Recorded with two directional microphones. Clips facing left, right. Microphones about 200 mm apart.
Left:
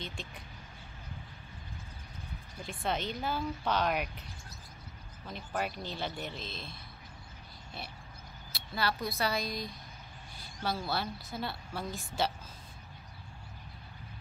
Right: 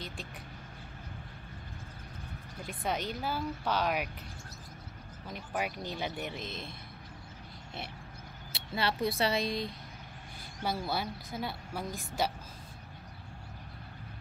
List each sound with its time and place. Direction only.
2.6 s a woman's voice: 10° right (ahead or behind)
5.3 s a woman's voice: 10° right (ahead or behind)
8.5 s speech: 25° right (ahead or behind)
10.6 s a woman's voice: 15° right (ahead or behind)